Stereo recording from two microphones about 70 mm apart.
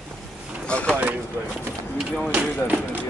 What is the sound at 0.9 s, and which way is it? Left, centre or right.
Speech, right.